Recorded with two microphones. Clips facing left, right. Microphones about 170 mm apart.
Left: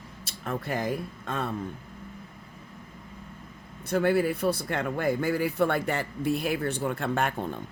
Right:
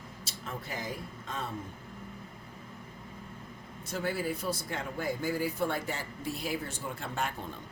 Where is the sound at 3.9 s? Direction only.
60° left (ahead or behind).